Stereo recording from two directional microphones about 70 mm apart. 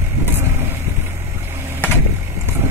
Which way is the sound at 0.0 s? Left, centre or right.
Right.